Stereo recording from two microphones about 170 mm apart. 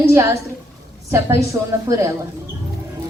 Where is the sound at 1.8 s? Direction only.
20° right (ahead or behind).